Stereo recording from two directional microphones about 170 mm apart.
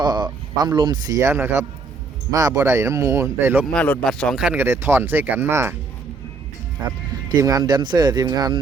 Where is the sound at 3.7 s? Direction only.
10° left (ahead or behind); by 5.7 s 15° right (ahead or behind).